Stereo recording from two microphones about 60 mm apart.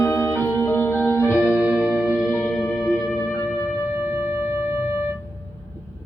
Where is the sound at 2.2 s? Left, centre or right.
Left.